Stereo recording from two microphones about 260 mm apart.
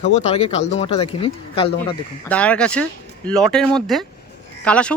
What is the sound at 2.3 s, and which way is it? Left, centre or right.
Speech, centre.